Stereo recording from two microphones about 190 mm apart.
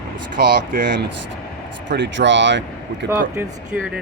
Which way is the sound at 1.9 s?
70° right (ahead or behind).